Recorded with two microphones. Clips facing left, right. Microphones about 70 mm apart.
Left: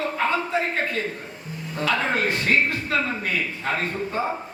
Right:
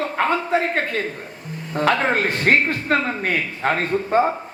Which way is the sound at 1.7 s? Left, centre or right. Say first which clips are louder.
Right 5 dB; right.